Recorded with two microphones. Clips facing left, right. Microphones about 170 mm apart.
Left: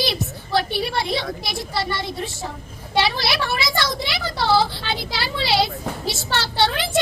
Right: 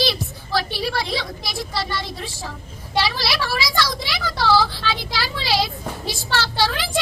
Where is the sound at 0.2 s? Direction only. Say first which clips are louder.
Left 2 dB; 25° left (ahead or behind).